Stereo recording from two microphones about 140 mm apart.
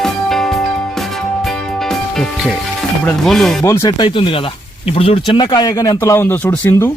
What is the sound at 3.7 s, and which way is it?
Speech, 25° left (ahead or behind).